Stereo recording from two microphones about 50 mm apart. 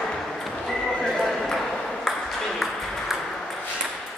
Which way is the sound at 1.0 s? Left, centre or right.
Centre.